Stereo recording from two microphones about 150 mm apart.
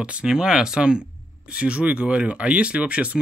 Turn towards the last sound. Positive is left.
turn(degrees=-10)  # may be behind; listen again after turning